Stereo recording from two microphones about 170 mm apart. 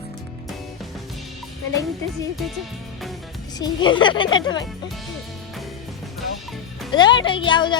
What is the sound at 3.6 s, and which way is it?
Speech, 25° left (ahead or behind).